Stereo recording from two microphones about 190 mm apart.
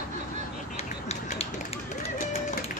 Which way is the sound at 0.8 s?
35° left (ahead or behind).